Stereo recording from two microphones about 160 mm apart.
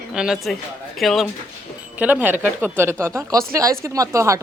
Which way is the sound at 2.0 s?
10° right (ahead or behind).